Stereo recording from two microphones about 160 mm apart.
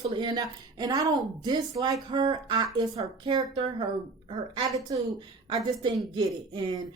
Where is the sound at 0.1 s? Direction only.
25° right (ahead or behind).